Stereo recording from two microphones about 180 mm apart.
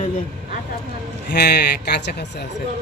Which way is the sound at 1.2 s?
65° left (ahead or behind).